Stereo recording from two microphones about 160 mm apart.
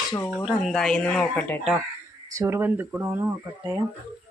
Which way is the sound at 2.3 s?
20° right (ahead or behind).